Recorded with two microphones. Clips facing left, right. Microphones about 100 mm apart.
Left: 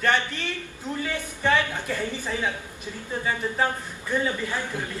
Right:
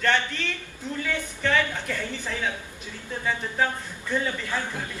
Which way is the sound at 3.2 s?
15° left (ahead or behind).